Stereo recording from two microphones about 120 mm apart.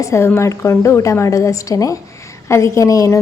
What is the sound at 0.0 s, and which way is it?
A woman's voice, 25° left (ahead or behind).